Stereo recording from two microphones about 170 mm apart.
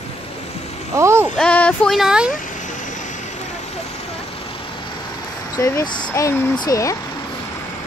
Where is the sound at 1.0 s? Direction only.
15° right (ahead or behind).